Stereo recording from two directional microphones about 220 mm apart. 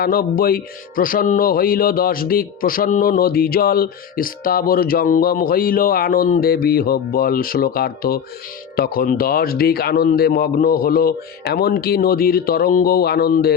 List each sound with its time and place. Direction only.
0.0 s speech: 40° left (ahead or behind)